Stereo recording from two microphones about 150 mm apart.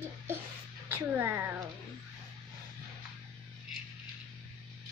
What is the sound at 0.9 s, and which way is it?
Speech, 15° right (ahead or behind).